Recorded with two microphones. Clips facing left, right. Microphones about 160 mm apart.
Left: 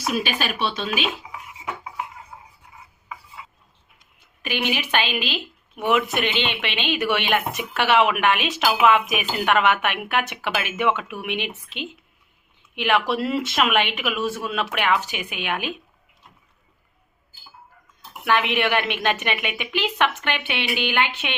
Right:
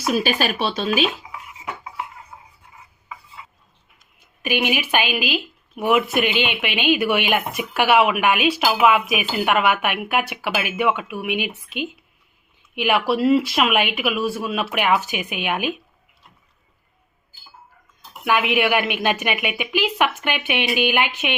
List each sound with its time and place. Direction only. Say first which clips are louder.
0.1 s speech: right 5 dB; 40° right (ahead or behind)
4.4 s a woman's voice: right 4 dB; 15° right (ahead or behind)
18.3 s a woman's voice: right 2 dB; 10° right (ahead or behind)